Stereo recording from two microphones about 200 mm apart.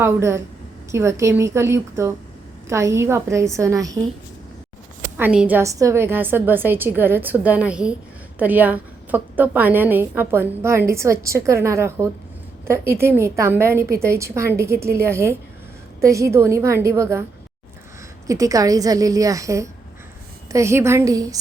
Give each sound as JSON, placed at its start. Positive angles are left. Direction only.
{"t": 0.0, "sound": "a woman's voice", "side_deg": -15}
{"t": 5.1, "sound": "a woman's voice", "side_deg": -5}
{"t": 18.3, "sound": "a woman's voice", "side_deg": -15}